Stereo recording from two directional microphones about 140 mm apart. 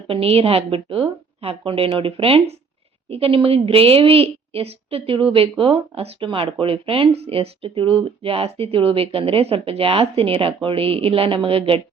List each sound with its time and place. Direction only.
0.1 s a woman's voice: 45° right (ahead or behind)